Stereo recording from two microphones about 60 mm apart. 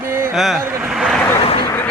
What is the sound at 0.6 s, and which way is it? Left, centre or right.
Speech, right.